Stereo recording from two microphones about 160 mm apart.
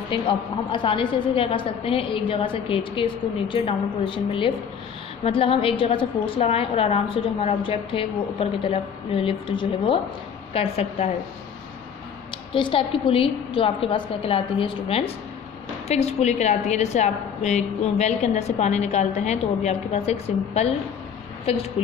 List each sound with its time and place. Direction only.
0.1 s a woman's voice: 30° left (ahead or behind)
12.5 s a woman's voice: 30° left (ahead or behind)